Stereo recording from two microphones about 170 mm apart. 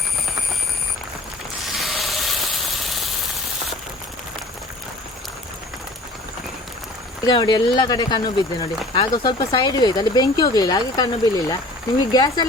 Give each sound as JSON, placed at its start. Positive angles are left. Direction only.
{"t": 1.6, "sound": "hiss", "side_deg": 0}
{"t": 7.3, "sound": "speech", "side_deg": 25}